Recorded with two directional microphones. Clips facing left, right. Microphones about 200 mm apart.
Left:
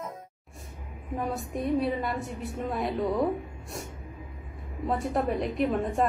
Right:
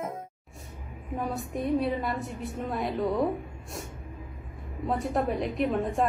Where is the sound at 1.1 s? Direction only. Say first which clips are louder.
Even; centre (ahead or behind).